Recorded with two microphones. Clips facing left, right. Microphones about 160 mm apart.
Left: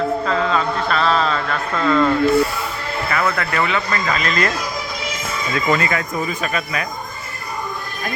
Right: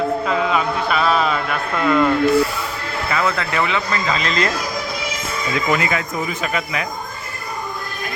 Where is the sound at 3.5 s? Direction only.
15° right (ahead or behind).